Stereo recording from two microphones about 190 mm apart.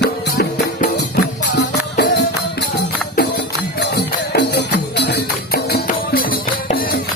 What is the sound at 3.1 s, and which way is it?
Music, 55° left (ahead or behind).